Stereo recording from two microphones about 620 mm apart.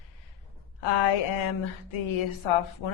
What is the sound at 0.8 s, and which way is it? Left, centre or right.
A woman's voice, left.